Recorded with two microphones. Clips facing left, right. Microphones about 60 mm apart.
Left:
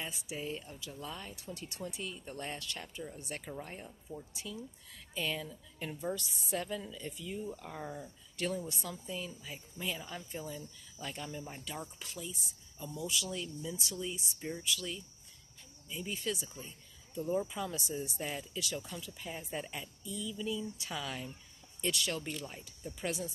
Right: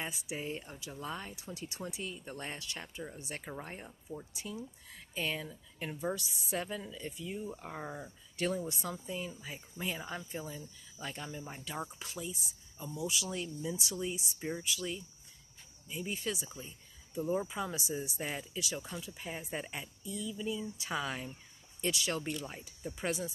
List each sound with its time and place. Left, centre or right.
0.4 s speech: right
1.3 s speech: centre
3.5 s speech: right; by 11.8 s centre
12.3 s speech: right
13.3 s speech: right
21.8 s speech: centre; by 23.1 s right